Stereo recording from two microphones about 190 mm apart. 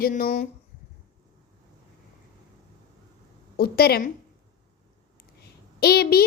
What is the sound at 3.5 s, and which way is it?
Speech, 55° left (ahead or behind).